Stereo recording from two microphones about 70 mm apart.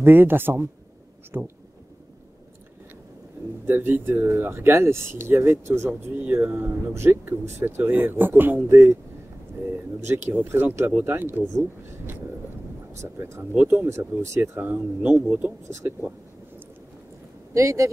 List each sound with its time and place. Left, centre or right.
0.0 s speech: right
3.6 s speech: right
8.6 s speech: right
10.0 s speech: right
13.0 s speech: right
13.8 s speech: right
14.6 s speech: right
17.6 s speech: right